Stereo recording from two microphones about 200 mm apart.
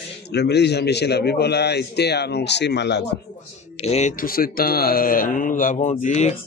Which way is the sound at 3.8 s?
35° left (ahead or behind).